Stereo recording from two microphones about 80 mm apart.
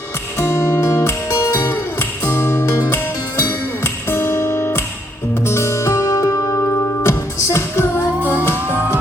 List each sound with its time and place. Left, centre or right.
0.3 s music: left
3.8 s music: left